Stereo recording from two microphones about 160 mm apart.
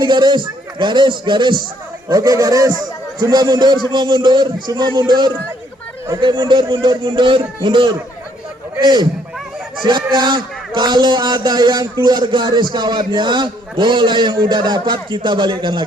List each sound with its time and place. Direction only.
0.0 s a man's voice: 30° right (ahead or behind)